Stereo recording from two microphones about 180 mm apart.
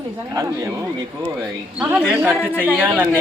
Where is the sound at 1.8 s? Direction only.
5° right (ahead or behind).